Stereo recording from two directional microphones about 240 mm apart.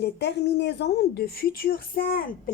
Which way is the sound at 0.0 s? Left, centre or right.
Left.